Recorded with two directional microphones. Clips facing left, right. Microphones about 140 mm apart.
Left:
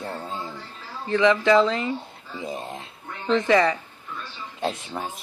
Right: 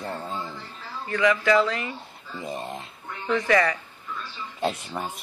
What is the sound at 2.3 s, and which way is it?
Speech, centre (ahead or behind).